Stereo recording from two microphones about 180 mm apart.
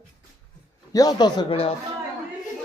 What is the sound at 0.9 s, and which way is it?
Speech, 20° left (ahead or behind).